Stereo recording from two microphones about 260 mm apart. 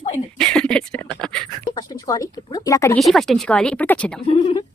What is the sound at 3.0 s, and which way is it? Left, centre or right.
Speech, centre.